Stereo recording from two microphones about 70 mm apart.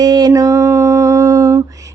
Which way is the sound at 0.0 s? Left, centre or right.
Right.